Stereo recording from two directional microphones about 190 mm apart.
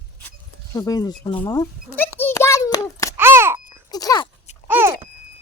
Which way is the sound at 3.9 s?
20° left (ahead or behind).